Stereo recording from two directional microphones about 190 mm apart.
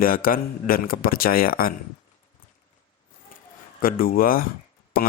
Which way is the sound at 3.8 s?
50° left (ahead or behind).